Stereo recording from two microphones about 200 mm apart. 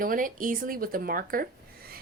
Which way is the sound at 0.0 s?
45° right (ahead or behind).